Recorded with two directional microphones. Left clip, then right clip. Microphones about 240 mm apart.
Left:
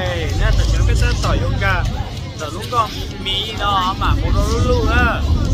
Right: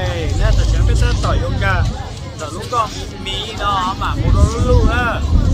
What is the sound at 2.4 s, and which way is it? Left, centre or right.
Music, centre.